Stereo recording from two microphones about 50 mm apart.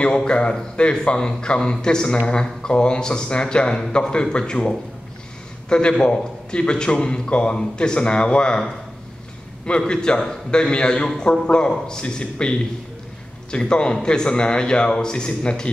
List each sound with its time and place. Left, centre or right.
0.0 s a man's voice: centre
9.7 s a man's voice: centre